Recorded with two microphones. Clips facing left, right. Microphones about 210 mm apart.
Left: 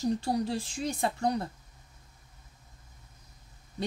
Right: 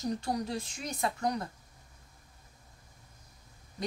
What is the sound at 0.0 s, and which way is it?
Speech, 30° left (ahead or behind).